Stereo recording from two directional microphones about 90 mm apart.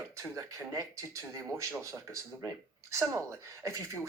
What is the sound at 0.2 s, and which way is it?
Speech, 35° right (ahead or behind).